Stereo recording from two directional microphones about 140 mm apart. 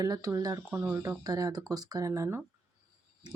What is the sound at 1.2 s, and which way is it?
A woman's voice, 25° right (ahead or behind).